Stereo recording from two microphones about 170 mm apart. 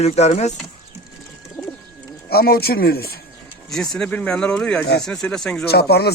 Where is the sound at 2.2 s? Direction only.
65° left (ahead or behind).